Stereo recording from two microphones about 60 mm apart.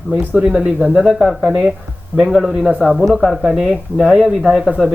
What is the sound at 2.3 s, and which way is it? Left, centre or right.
Speech, centre.